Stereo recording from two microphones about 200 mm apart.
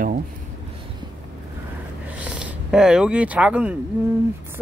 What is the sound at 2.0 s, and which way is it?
Speech, 5° right (ahead or behind).